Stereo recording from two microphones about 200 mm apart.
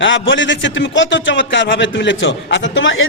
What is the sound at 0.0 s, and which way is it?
A man's voice, 65° left (ahead or behind).